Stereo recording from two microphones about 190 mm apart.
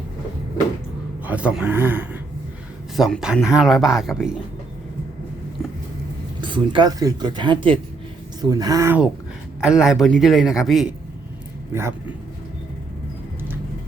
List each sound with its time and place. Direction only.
1.2 s speech: 5° right (ahead or behind)
6.4 s speech: 25° right (ahead or behind)
9.6 s speech: 5° right (ahead or behind)
11.7 s speech: 15° right (ahead or behind)